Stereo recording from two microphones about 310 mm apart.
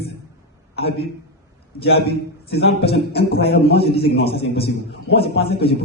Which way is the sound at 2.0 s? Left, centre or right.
Left.